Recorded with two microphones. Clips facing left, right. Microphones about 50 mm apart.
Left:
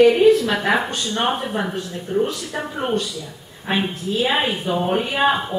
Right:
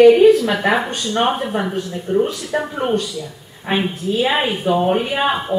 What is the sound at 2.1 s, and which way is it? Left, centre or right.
Speech, centre.